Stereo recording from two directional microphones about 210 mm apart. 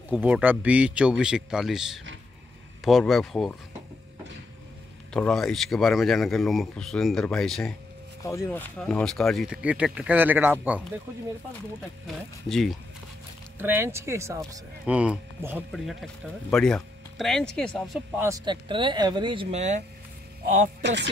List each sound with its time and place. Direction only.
0.1 s speech: 5° right (ahead or behind)
5.1 s speech: 5° left (ahead or behind)
8.2 s speech: 15° left (ahead or behind); by 10.8 s 10° right (ahead or behind)
12.1 s speech: centre (ahead or behind)
13.6 s speech: 10° right (ahead or behind); by 19.8 s 30° right (ahead or behind)
20.8 s speech: 55° right (ahead or behind)